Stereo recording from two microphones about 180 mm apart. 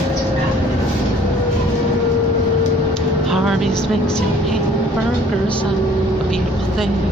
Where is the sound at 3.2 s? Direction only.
Centre (ahead or behind).